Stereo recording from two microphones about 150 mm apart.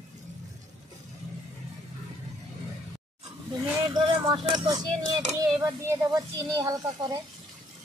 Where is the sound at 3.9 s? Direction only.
35° right (ahead or behind).